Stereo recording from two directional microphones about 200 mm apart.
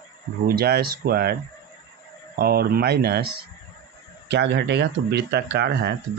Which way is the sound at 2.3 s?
50° right (ahead or behind).